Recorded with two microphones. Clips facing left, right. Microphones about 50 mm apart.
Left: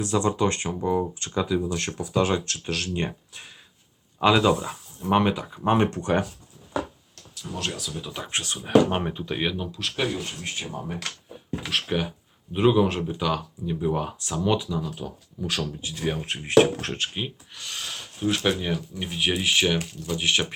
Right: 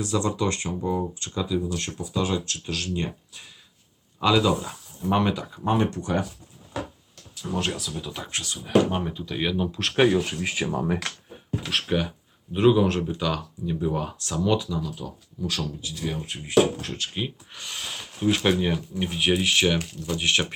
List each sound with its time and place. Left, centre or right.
0.0 s speech: left
0.8 s speech: left
4.2 s speech: left
5.6 s speech: left
7.4 s speech: centre
7.8 s speech: centre
8.3 s speech: left
9.7 s speech: right
10.1 s speech: right
11.6 s speech: centre
14.8 s speech: left
16.1 s speech: left
17.5 s speech: centre